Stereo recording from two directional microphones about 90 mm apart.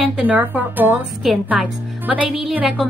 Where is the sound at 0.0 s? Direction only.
15° right (ahead or behind).